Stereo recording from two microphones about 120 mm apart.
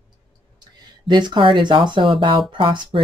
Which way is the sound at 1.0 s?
40° right (ahead or behind).